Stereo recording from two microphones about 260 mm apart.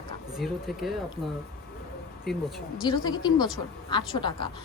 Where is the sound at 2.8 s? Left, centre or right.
Centre.